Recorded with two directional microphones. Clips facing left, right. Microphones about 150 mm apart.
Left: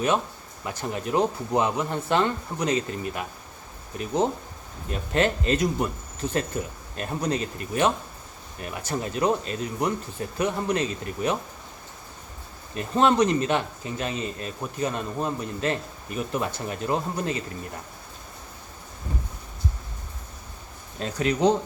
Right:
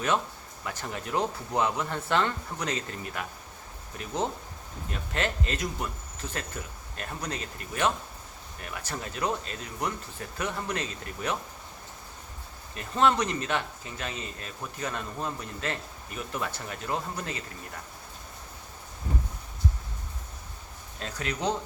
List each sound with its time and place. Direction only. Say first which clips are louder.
0.6 s speech: left 5 dB; 20° left (ahead or behind)
12.7 s speech: left 4 dB; 20° left (ahead or behind)
21.0 s speech: left 9 dB; 20° left (ahead or behind)